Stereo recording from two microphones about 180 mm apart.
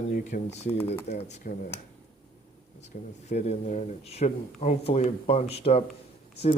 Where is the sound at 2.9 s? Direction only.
45° left (ahead or behind).